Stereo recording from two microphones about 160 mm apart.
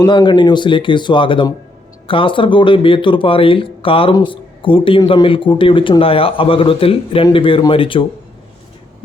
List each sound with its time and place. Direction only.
0.0 s speech: 30° left (ahead or behind)